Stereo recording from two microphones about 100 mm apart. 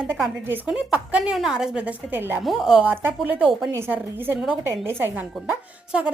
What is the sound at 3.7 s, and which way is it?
A woman's voice, 25° right (ahead or behind).